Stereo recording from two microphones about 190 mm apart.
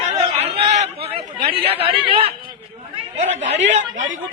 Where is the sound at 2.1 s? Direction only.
30° right (ahead or behind).